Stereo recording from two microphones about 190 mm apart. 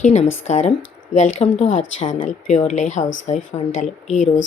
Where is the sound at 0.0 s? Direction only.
35° left (ahead or behind).